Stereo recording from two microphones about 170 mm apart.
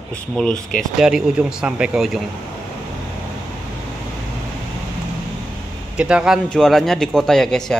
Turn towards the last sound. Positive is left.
turn(degrees=5)  # may be behind; listen again after turning